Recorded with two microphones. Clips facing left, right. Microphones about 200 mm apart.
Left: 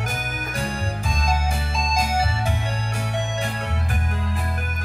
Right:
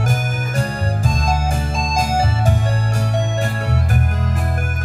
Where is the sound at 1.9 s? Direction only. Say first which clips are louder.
Right 4 dB; 45° right (ahead or behind).